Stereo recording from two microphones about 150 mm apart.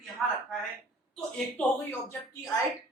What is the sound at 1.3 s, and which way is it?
Speech, 10° left (ahead or behind).